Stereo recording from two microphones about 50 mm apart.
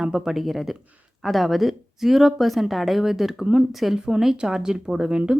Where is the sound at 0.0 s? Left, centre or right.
Centre.